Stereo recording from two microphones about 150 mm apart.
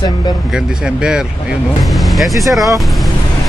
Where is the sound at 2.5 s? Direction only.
Centre (ahead or behind).